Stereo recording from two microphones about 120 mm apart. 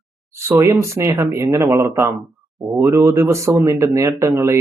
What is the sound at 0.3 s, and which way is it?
Speech, 25° right (ahead or behind).